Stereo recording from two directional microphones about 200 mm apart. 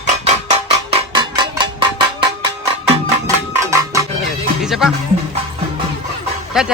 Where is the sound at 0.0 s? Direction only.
35° right (ahead or behind).